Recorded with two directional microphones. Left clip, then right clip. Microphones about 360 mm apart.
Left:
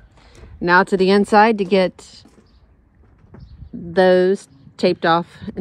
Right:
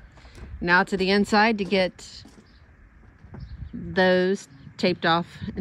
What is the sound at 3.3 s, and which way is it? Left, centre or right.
Bird, right.